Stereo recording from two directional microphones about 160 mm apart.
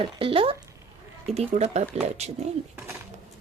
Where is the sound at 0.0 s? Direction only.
35° right (ahead or behind).